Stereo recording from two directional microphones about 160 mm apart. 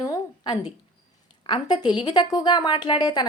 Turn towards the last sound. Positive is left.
turn(degrees=25)  # may be behind; listen again after turning